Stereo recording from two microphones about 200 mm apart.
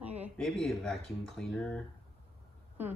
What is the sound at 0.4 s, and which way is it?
Speech, centre (ahead or behind).